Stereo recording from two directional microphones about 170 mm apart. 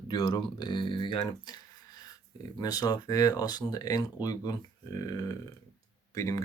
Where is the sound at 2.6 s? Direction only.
20° left (ahead or behind).